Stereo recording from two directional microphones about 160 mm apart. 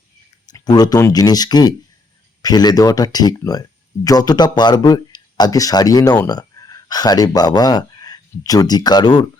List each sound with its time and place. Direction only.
0.4 s speech: 25° left (ahead or behind)